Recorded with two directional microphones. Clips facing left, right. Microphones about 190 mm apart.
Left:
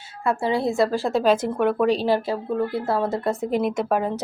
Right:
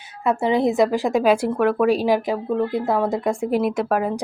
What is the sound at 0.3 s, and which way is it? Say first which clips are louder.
A woman's voice: right 3 dB; 20° right (ahead or behind).